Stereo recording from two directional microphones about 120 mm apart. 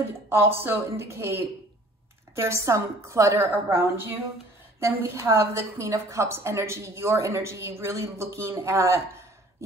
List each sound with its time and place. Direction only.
0.6 s a woman's voice: 20° right (ahead or behind)